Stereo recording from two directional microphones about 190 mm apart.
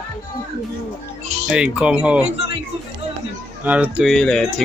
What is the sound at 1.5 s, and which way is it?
Speech, 5° right (ahead or behind).